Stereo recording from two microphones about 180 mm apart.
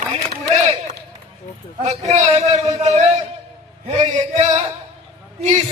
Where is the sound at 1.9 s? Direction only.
40° right (ahead or behind).